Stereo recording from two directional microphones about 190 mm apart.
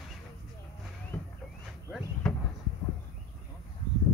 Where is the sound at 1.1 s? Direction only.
5° left (ahead or behind).